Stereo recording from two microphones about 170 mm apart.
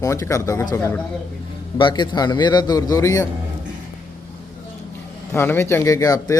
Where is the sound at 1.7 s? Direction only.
25° left (ahead or behind).